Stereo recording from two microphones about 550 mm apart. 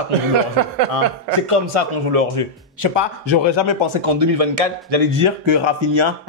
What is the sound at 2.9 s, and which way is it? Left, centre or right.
A man's voice, right.